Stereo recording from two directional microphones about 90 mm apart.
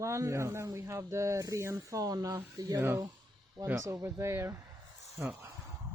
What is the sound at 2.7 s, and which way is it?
Speech, 30° right (ahead or behind).